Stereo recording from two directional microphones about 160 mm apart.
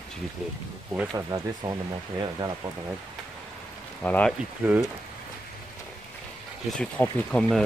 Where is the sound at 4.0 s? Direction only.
10° left (ahead or behind).